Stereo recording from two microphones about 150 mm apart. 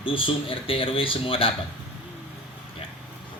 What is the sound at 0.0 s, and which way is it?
Speech, 35° left (ahead or behind).